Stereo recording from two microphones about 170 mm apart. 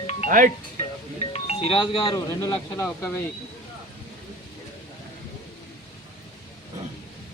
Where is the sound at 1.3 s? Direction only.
35° left (ahead or behind).